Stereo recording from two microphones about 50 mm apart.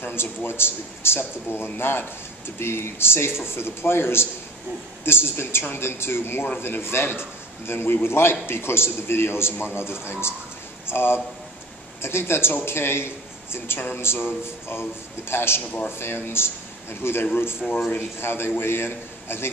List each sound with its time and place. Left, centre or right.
0.0 s a man's voice: left